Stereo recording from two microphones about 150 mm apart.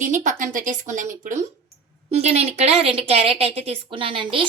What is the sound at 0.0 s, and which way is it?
Speech, 55° right (ahead or behind).